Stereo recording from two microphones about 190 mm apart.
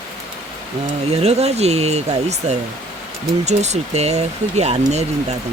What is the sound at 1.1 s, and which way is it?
Speech, 35° right (ahead or behind).